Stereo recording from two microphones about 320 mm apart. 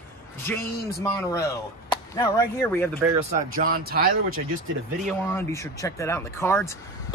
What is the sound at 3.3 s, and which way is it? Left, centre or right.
Speech, right.